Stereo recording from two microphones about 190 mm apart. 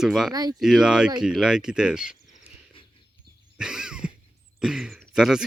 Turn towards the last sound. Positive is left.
turn(degrees=-5)  # may be behind; listen again after turning